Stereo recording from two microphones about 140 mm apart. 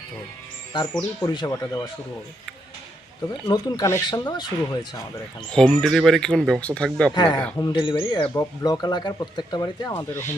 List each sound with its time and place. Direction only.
0.7 s speech: 30° left (ahead or behind)
3.4 s speech: 30° left (ahead or behind)
5.5 s speech: 5° left (ahead or behind)
7.1 s speech: 30° left (ahead or behind)
9.9 s speech: 15° left (ahead or behind)